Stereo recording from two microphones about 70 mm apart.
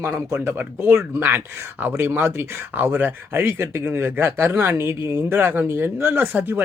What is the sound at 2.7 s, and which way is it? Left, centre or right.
Speech, right.